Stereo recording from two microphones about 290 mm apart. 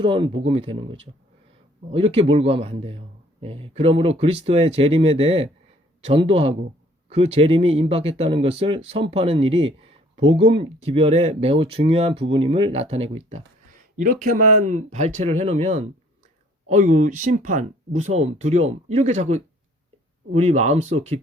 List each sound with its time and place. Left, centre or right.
0.0 s speech: centre